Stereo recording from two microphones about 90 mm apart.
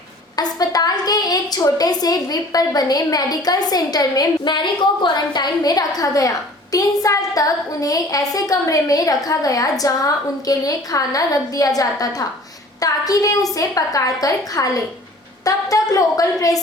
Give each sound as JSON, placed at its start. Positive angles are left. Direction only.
{"t": 0.3, "sound": "a woman's voice", "side_deg": 45}